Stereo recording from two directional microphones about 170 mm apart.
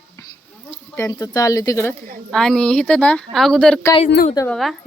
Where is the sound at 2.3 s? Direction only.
5° left (ahead or behind).